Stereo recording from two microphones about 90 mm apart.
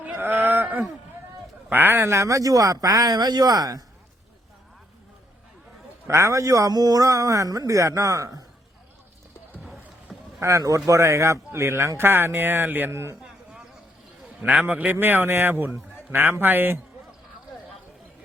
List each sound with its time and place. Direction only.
0.0 s a sound: 20° right (ahead or behind)
1.7 s speech: 20° right (ahead or behind); by 3.8 s 45° right (ahead or behind)
6.1 s speech: 30° right (ahead or behind)
10.1 s rowboat: 5° right (ahead or behind)
10.4 s speech: 35° right (ahead or behind)
13.2 s a sound: 10° right (ahead or behind)
14.4 s a man's voice: 15° right (ahead or behind)